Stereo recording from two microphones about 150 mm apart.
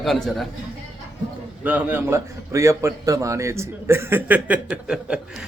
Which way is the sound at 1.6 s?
10° right (ahead or behind).